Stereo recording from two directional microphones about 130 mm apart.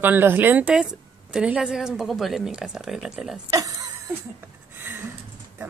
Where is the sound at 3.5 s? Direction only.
25° right (ahead or behind).